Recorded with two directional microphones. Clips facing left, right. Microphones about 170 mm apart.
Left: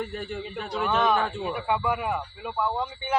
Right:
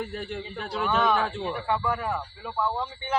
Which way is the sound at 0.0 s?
Centre (ahead or behind).